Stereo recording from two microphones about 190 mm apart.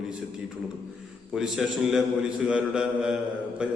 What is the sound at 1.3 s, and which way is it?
A man's voice, centre (ahead or behind).